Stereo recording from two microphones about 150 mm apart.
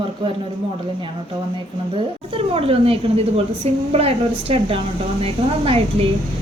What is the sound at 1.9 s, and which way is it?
A woman's voice, 40° right (ahead or behind).